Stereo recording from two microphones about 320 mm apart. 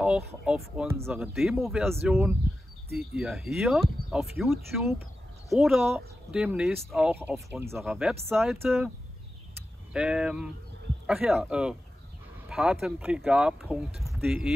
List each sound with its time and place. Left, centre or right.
0.5 s speech: centre
9.9 s speech: centre
12.4 s a sound: centre
12.8 s speech: centre